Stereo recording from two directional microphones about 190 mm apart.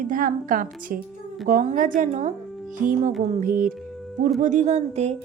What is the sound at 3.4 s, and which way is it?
Speech, 45° right (ahead or behind).